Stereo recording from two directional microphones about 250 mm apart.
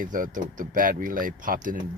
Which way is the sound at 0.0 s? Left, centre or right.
Right.